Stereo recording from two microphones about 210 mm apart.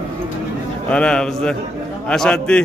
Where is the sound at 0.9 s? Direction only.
5° left (ahead or behind).